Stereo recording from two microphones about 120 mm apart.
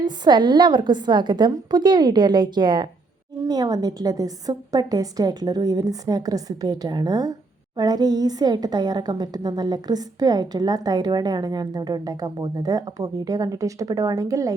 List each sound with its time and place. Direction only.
0.0 s a woman's voice: 40° right (ahead or behind)